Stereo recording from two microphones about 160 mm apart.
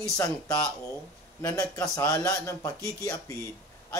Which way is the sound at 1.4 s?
20° left (ahead or behind).